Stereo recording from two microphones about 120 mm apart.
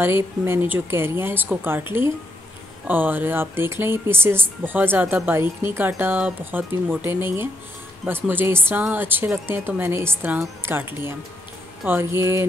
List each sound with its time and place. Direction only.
0.0 s speech: 20° right (ahead or behind)